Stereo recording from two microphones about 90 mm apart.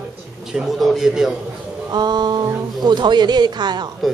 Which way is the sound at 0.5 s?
5° right (ahead or behind).